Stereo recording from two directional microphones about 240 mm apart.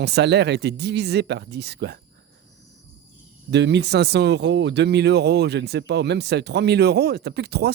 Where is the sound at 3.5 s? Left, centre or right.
Right.